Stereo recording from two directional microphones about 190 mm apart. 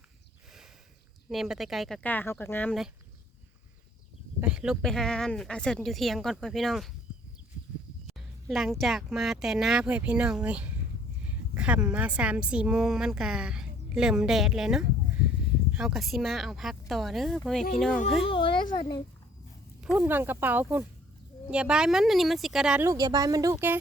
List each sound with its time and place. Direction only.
1.3 s a woman's voice: centre (ahead or behind)
4.4 s a woman's voice: 5° right (ahead or behind)
8.0 s a woman's voice: centre (ahead or behind)
18.2 s a child's voice: 25° left (ahead or behind)
19.8 s a woman's voice: 5° right (ahead or behind)
22.9 s speech: 20° right (ahead or behind)